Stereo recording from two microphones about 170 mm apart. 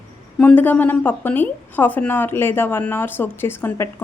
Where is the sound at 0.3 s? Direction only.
10° left (ahead or behind).